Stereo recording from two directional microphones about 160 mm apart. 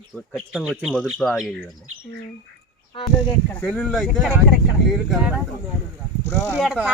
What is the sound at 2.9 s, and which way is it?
Speech, 35° left (ahead or behind).